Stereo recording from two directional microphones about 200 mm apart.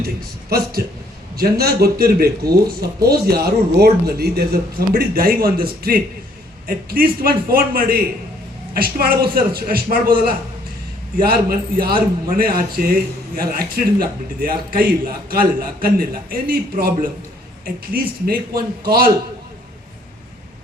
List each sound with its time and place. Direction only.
1.4 s a woman's voice: 50° right (ahead or behind)